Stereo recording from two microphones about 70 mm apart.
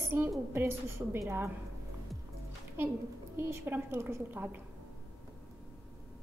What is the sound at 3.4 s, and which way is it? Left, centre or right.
A woman's voice, right.